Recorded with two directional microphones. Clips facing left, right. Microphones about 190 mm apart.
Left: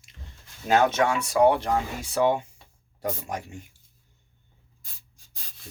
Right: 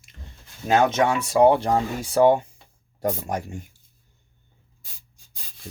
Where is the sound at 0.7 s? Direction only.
15° right (ahead or behind).